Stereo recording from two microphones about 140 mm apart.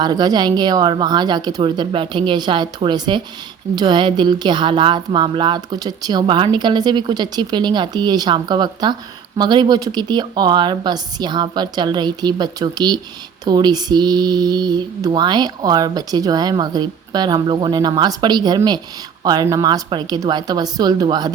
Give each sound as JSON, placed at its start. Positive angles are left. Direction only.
{"t": 0.0, "sound": "speech", "side_deg": -30}
{"t": 13.4, "sound": "mantra", "side_deg": -30}